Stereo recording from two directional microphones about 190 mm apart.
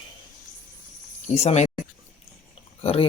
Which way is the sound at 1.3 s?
35° left (ahead or behind).